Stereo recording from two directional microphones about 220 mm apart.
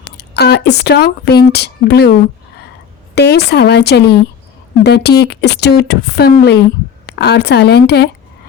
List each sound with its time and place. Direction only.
0.3 s speech: 50° left (ahead or behind)
3.3 s speech: 50° left (ahead or behind)